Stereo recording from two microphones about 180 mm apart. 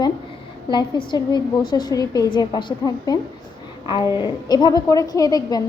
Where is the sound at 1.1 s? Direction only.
25° left (ahead or behind).